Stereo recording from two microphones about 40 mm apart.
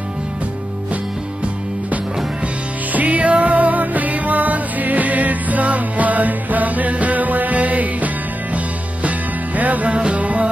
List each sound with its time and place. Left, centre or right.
2.4 s music: right
9.6 s music: right